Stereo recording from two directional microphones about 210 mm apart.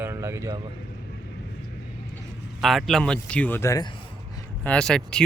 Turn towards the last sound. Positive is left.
turn(degrees=5)  # may be behind; listen again after turning